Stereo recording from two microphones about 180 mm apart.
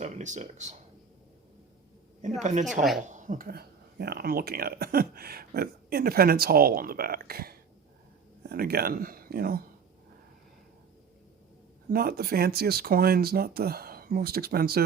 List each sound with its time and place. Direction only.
0.0 s speech: 40° right (ahead or behind)
2.4 s speech: 45° right (ahead or behind)
11.9 s speech: 60° right (ahead or behind)